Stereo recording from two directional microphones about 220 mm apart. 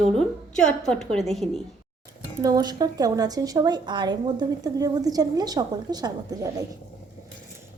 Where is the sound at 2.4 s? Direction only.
15° right (ahead or behind).